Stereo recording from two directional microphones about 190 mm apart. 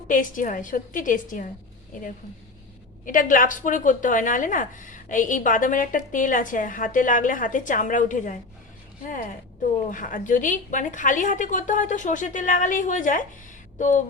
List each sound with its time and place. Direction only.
0.1 s a woman's voice: 45° left (ahead or behind)
3.1 s a woman's voice: 45° left (ahead or behind)